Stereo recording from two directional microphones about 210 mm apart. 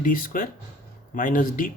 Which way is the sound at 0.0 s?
40° left (ahead or behind).